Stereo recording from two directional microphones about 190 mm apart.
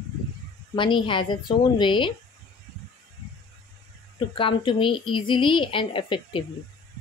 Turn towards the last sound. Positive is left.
turn(degrees=25)  # may be behind; listen again after turning